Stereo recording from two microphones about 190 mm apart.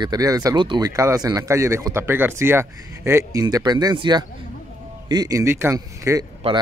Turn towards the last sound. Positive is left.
turn(degrees=-15)  # may be behind; listen again after turning